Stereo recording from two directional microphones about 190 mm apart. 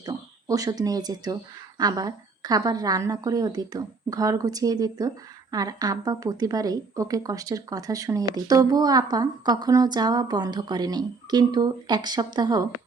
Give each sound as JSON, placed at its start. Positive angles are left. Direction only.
{"t": 0.0, "sound": "a woman's voice", "side_deg": -20}